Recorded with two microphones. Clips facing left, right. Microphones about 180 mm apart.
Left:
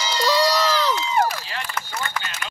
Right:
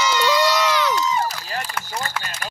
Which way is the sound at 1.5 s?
40° right (ahead or behind).